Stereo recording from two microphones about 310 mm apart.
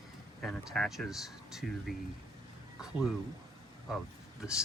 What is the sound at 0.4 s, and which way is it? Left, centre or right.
Speech, centre.